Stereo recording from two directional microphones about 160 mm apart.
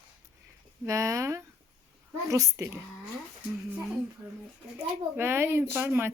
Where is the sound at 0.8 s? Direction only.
20° right (ahead or behind).